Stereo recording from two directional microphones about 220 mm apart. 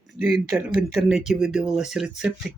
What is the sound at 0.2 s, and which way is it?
Speech, 5° right (ahead or behind).